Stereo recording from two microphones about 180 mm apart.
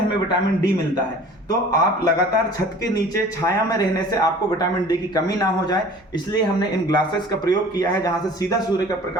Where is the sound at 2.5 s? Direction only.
20° left (ahead or behind).